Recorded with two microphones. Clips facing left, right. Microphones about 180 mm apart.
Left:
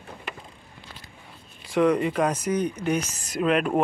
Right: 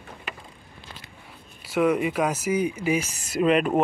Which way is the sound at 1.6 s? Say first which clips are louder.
Left 1 dB; 5° right (ahead or behind).